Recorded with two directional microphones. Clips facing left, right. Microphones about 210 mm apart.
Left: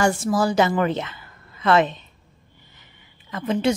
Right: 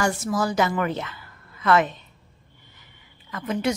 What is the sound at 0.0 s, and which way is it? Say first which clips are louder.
A woman's voice: left 4 dB; 30° left (ahead or behind).